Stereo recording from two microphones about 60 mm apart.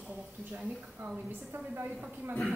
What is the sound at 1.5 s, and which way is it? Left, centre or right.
Speech, right.